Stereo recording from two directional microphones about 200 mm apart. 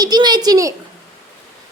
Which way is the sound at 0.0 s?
20° right (ahead or behind).